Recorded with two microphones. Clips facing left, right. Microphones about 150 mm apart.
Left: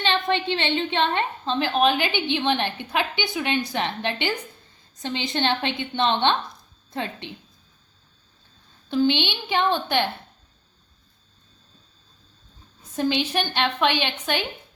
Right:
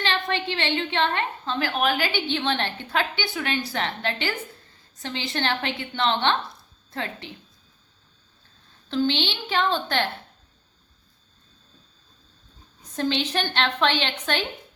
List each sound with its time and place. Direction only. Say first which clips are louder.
0.0 s a woman's voice: left 3 dB; 20° left (ahead or behind)
8.9 s a woman's voice: left 3 dB; 15° left (ahead or behind)
13.0 s a woman's voice: left 2 dB; 10° left (ahead or behind)